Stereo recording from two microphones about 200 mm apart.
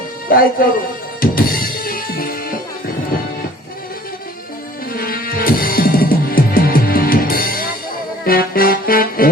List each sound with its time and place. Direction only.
0.3 s speech: 45° left (ahead or behind)
1.2 s music: 45° left (ahead or behind)
4.9 s music: 45° left (ahead or behind)